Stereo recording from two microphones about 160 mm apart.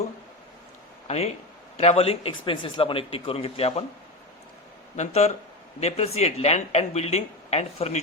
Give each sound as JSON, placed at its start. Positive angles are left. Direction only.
{"t": 1.0, "sound": "speech", "side_deg": 45}
{"t": 4.9, "sound": "speech", "side_deg": 40}